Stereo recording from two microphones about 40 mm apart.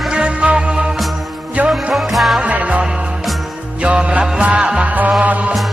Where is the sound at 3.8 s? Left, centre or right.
Right.